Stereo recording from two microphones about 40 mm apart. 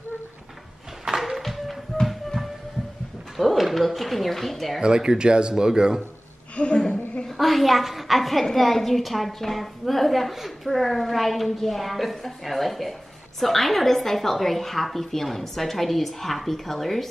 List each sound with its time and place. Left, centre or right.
1.0 s a sound: centre
1.4 s music: centre
3.3 s a woman's voice: centre
4.7 s speech: centre
6.5 s a woman's voice: left
7.2 s a woman's voice: centre